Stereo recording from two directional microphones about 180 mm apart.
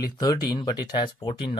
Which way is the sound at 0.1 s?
20° left (ahead or behind).